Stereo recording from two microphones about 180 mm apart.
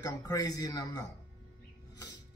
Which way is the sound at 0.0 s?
20° left (ahead or behind).